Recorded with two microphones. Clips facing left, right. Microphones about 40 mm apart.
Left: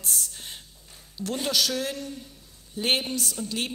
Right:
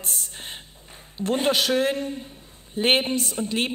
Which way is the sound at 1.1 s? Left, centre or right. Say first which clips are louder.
Right 5 dB; right.